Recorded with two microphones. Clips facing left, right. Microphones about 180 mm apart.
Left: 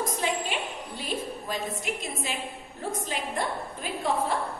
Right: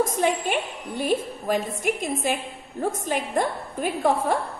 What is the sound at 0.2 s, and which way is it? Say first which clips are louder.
A woman's voice: right 6 dB; 55° right (ahead or behind).